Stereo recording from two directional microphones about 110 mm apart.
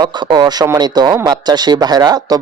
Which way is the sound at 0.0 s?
45° right (ahead or behind).